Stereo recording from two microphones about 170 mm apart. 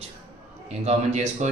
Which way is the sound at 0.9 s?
40° right (ahead or behind).